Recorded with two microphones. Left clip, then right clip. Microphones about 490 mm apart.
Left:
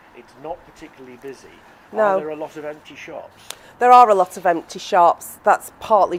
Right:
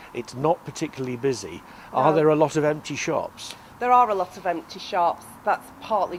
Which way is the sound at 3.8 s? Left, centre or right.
Left.